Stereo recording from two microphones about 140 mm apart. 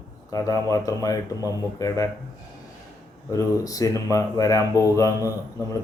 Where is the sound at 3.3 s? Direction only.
25° left (ahead or behind).